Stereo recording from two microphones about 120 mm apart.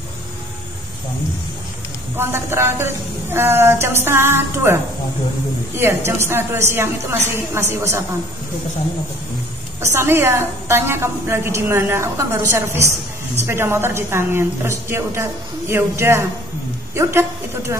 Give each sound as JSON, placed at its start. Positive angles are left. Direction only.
{"t": 2.1, "sound": "a woman's voice", "side_deg": -20}
{"t": 9.8, "sound": "a woman's voice", "side_deg": -20}